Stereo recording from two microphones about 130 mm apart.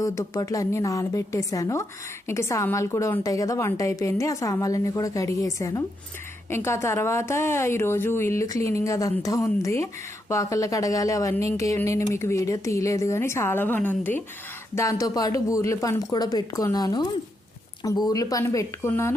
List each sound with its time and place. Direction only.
0.0 s a woman's voice: 25° left (ahead or behind)
14.8 s a woman's voice: 25° left (ahead or behind)